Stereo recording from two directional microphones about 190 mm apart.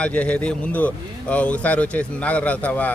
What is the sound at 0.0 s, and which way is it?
Speech, 5° left (ahead or behind).